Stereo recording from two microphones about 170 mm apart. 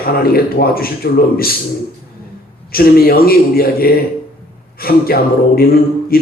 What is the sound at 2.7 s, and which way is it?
Speech, 60° left (ahead or behind).